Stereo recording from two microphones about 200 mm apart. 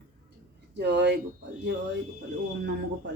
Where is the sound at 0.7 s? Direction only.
60° right (ahead or behind).